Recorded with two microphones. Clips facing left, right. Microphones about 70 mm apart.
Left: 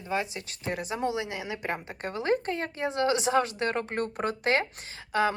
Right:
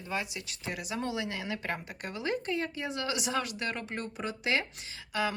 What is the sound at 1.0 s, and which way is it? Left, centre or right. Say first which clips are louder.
Speech: left 4 dB; left.